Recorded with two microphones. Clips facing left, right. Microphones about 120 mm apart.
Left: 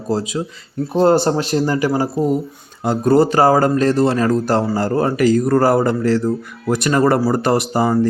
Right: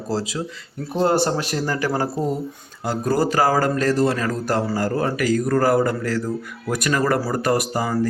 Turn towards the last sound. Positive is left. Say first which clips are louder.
# left 5 dB
turn(degrees=30)  # may be behind; listen again after turning